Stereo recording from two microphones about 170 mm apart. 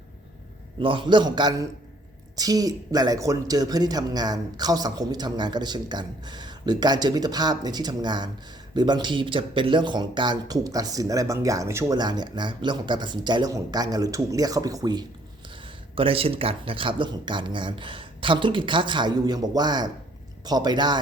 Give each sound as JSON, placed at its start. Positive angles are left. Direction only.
{"t": 0.8, "sound": "speech", "side_deg": -30}
{"t": 15.6, "sound": "speech", "side_deg": -35}